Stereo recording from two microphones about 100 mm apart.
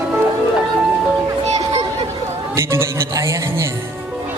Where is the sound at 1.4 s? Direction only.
90° right.